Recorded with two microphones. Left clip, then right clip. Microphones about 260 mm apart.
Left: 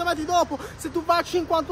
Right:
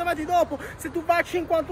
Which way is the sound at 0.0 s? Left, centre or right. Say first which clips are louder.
Even; centre.